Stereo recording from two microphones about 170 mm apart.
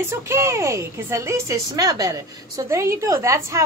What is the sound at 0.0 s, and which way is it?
A woman's voice, 15° right (ahead or behind).